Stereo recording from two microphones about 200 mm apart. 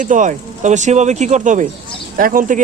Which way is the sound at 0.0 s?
40° right (ahead or behind).